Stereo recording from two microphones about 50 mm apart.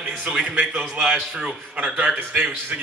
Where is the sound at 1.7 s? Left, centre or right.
Right.